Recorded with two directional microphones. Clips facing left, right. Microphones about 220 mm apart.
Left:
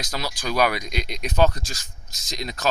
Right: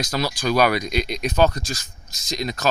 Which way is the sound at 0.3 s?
20° left (ahead or behind).